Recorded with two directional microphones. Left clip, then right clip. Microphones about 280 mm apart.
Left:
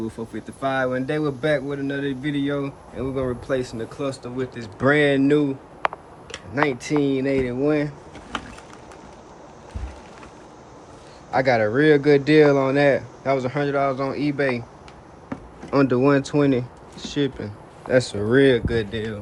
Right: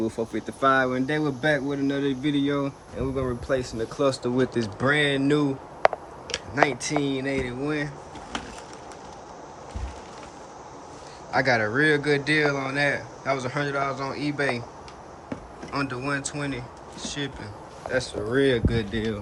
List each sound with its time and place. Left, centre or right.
0.3 s speech: centre
3.9 s speech: right
4.8 s speech: centre
5.8 s a sound: centre
6.5 s speech: centre
11.3 s speech: centre
15.3 s a sound: centre
17.9 s speech: left
18.3 s speech: centre
18.7 s speech: centre